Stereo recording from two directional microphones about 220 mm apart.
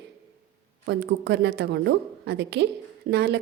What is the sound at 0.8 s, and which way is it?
A woman's voice, 50° right (ahead or behind).